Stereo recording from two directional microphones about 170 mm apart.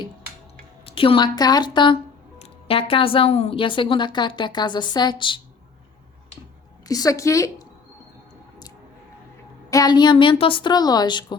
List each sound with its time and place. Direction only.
0.9 s a woman's voice: 30° left (ahead or behind)
6.8 s a woman's voice: 20° left (ahead or behind)
9.6 s a woman's voice: 20° left (ahead or behind)